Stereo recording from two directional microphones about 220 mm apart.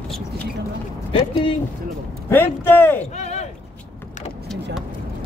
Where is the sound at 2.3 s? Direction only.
10° left (ahead or behind).